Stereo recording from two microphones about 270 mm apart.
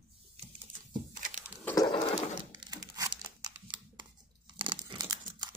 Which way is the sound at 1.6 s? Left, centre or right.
Centre.